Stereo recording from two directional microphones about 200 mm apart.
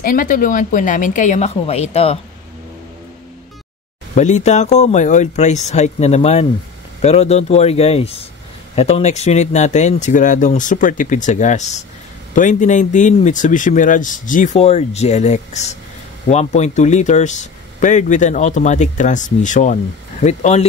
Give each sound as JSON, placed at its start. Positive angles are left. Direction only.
{"t": 0.0, "sound": "speech", "side_deg": 45}
{"t": 4.1, "sound": "speech", "side_deg": 35}